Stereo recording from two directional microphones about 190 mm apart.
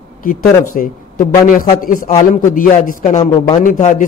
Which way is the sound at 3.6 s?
40° left (ahead or behind).